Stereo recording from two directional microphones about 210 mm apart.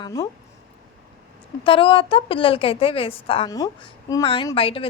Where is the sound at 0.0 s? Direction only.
15° left (ahead or behind).